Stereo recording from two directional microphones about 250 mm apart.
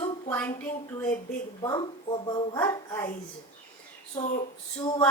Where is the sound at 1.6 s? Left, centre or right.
Centre.